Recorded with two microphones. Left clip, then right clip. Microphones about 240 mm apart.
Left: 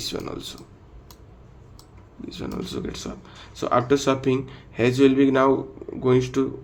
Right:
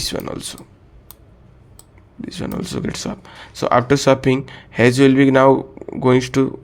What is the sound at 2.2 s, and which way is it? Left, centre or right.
Speech, right.